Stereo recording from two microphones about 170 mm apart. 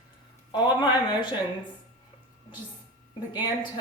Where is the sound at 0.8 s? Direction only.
25° left (ahead or behind).